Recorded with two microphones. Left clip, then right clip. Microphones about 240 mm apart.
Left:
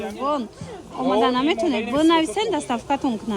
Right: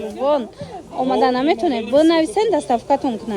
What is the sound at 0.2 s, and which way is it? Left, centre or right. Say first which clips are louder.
Speech: right 7 dB; left.